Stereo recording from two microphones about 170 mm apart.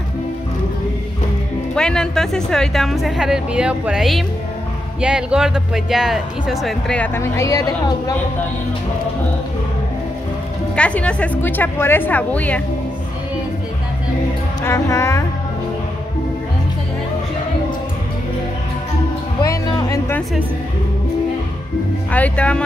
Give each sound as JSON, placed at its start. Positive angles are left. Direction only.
{"t": 1.8, "sound": "speech", "side_deg": 5}
{"t": 10.8, "sound": "a woman's voice", "side_deg": 5}
{"t": 14.6, "sound": "a woman's voice", "side_deg": 15}
{"t": 19.4, "sound": "music", "side_deg": 20}
{"t": 22.1, "sound": "a woman's voice", "side_deg": 10}